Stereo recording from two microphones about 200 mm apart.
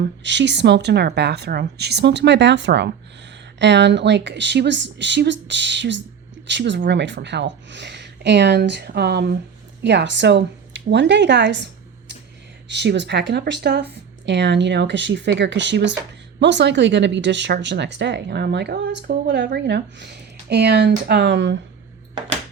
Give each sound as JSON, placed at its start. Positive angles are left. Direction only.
{"t": 0.0, "sound": "speech", "side_deg": -60}